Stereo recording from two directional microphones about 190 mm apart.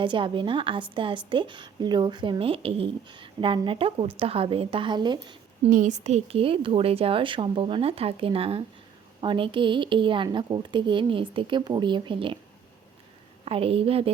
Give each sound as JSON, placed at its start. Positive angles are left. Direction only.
{"t": 0.0, "sound": "a woman's voice", "side_deg": -25}
{"t": 5.6, "sound": "a woman's voice", "side_deg": -40}
{"t": 13.4, "sound": "a woman's voice", "side_deg": -30}